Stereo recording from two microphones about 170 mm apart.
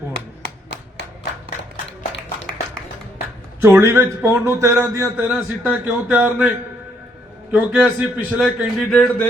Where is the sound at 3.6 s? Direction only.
15° right (ahead or behind).